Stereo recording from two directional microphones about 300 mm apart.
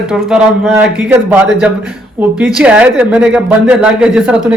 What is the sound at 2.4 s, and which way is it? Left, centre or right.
Speech, centre.